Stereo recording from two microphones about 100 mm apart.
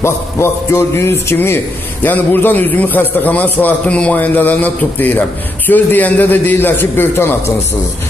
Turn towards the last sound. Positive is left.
turn(degrees=20)  # may be behind; listen again after turning